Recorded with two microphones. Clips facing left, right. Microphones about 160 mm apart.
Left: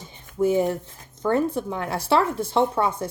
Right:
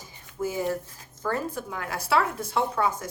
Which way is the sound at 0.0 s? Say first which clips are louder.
Left 8 dB; 25° left (ahead or behind).